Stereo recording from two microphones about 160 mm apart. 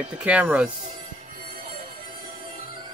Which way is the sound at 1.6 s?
35° right (ahead or behind).